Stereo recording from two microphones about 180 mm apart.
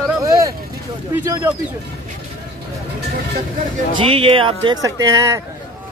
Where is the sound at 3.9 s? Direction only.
30° right (ahead or behind).